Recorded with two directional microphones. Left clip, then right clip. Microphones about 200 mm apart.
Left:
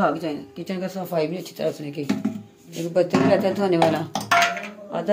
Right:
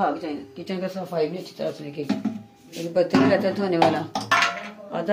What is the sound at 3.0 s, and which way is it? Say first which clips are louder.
Speech: left 1 dB; 10° left (ahead or behind).